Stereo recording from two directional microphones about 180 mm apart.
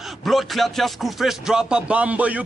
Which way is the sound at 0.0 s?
Centre (ahead or behind).